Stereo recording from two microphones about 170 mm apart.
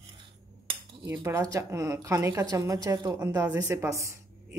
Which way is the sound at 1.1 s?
15° right (ahead or behind).